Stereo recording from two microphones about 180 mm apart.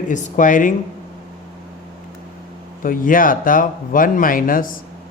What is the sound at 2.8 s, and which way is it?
Speech, 50° left (ahead or behind).